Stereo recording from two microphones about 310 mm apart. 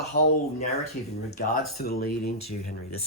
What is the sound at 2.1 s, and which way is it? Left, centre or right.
Speech, left.